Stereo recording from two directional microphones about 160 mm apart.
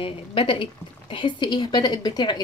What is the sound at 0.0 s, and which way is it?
A woman's voice, 35° left (ahead or behind).